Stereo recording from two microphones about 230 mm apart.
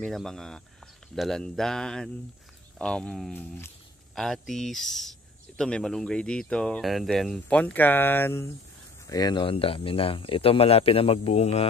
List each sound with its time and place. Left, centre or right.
0.0 s speech: centre; by 11.6 s left